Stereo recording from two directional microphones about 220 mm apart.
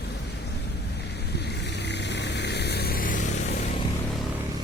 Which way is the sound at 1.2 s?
50° left (ahead or behind).